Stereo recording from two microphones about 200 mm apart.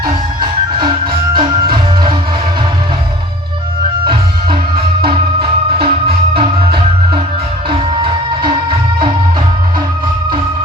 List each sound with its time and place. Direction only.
0.8 s music: 25° right (ahead or behind)
4.0 s music: 25° right (ahead or behind)